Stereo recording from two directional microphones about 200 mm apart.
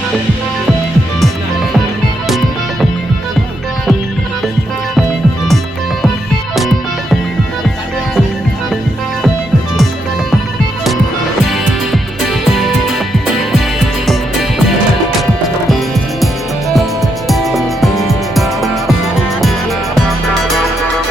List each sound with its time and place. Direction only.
11.4 s music: centre (ahead or behind)
16.2 s music: centre (ahead or behind)